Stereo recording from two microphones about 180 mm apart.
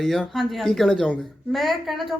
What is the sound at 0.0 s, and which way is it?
A woman's voice, centre (ahead or behind).